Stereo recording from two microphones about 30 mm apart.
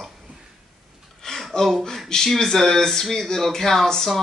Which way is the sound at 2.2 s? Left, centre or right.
Centre.